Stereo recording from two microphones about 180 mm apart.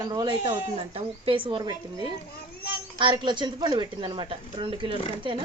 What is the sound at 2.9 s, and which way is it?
Speech, 25° right (ahead or behind).